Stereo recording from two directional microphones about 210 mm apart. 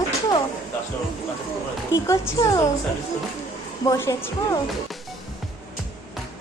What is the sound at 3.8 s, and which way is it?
Speech, 15° left (ahead or behind).